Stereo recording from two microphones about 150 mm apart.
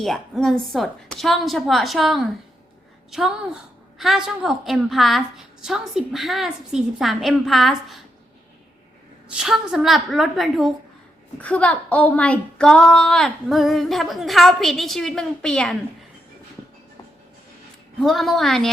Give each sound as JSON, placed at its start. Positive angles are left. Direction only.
{"t": 0.0, "sound": "a woman's voice", "side_deg": 0}
{"t": 9.3, "sound": "a woman's voice", "side_deg": -5}
{"t": 18.0, "sound": "a woman's voice", "side_deg": 0}